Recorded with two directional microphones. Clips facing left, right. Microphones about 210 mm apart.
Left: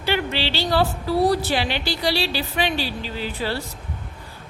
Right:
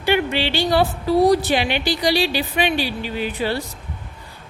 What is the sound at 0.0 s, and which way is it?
A woman's voice, 15° right (ahead or behind).